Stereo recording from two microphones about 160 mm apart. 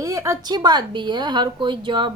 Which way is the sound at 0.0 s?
20° right (ahead or behind).